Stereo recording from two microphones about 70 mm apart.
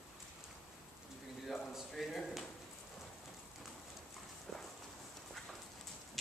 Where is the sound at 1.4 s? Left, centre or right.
Centre.